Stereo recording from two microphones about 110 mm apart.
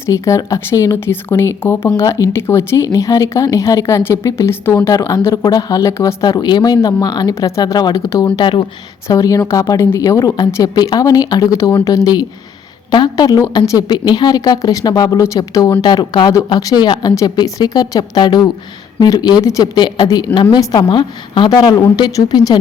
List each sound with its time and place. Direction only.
0.0 s speech: 30° left (ahead or behind)
2.0 s a woman's voice: 30° left (ahead or behind)
5.5 s a woman's voice: 35° left (ahead or behind)
6.2 s a woman's voice: 40° left (ahead or behind)
8.4 s speech: 50° left (ahead or behind)
9.0 s a woman's voice: 30° left (ahead or behind)
19.7 s a woman's voice: 40° left (ahead or behind)